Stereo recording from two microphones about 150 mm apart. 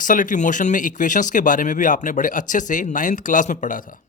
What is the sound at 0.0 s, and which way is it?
Speech, 60° left (ahead or behind).